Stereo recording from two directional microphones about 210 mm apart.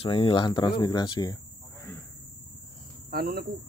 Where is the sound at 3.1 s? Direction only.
50° right (ahead or behind).